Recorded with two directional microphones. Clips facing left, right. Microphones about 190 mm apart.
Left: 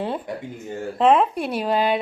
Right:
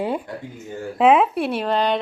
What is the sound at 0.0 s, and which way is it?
A woman's voice, 10° right (ahead or behind).